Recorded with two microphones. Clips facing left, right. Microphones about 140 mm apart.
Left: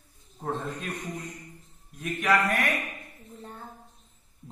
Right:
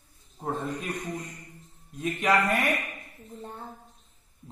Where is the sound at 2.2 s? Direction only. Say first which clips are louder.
Even; 25° right (ahead or behind).